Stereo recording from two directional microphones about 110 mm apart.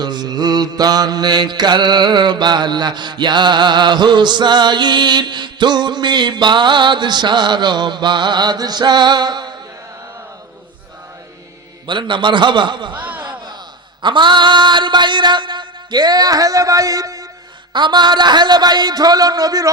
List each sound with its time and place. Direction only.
0.0 s mantra: 40° right (ahead or behind)
11.9 s a man's voice: 45° right (ahead or behind)
12.9 s speech: 15° right (ahead or behind)
14.0 s a sound: 45° right (ahead or behind)
17.7 s mantra: 45° right (ahead or behind)